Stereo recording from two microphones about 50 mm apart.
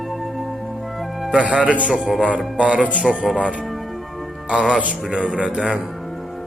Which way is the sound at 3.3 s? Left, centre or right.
Left.